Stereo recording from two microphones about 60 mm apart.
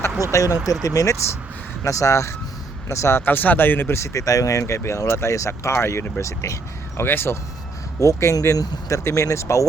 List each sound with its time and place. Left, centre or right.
0.3 s speech: left
2.9 s speech: left
7.0 s speech: left
7.9 s speech: left
9.0 s speech: left